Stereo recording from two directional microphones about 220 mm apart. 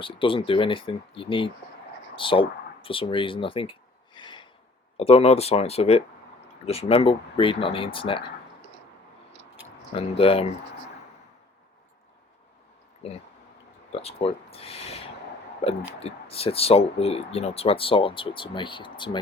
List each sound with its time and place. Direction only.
0.0 s speech: 25° left (ahead or behind)
4.1 s a sound: 20° left (ahead or behind)
4.9 s speech: 25° left (ahead or behind)
9.9 s speech: 25° left (ahead or behind)
13.0 s speech: 30° left (ahead or behind)